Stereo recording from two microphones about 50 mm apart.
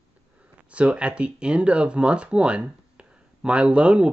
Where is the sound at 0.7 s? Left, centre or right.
Right.